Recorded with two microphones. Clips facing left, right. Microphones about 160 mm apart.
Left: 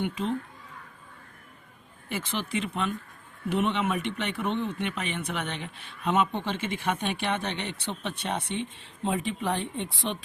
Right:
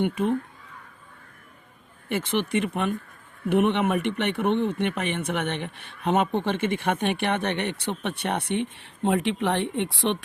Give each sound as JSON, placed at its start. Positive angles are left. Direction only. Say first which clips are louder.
{"t": 0.0, "sound": "speech", "louder": "right 5 dB", "side_deg": -55}
{"t": 2.0, "sound": "speech", "louder": "right 7 dB", "side_deg": -60}